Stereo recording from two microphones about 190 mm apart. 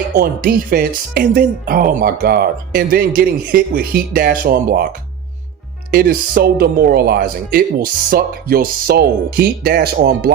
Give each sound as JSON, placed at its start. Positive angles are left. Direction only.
{"t": 0.1, "sound": "speech", "side_deg": -50}